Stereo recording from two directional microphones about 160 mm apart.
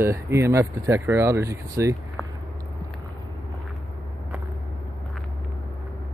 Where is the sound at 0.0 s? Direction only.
15° right (ahead or behind).